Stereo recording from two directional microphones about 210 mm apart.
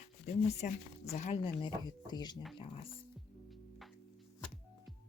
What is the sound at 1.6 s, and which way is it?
Speech, 20° left (ahead or behind).